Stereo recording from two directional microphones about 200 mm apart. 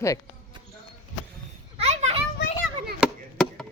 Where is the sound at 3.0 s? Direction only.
5° left (ahead or behind).